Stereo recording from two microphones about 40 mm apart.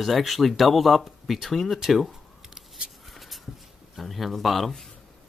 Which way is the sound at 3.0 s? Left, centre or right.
Centre.